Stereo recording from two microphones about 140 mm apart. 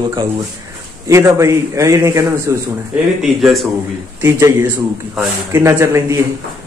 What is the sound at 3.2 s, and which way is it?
Speech, centre (ahead or behind).